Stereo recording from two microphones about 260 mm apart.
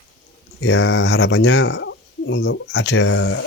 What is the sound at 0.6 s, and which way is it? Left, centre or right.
Speech, left.